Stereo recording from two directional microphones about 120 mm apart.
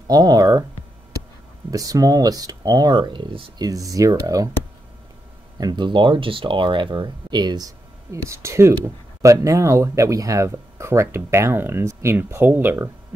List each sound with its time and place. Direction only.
0.1 s speech: 35° right (ahead or behind)
1.7 s speech: 30° right (ahead or behind)
5.6 s speech: 35° right (ahead or behind); by 12.9 s 20° right (ahead or behind)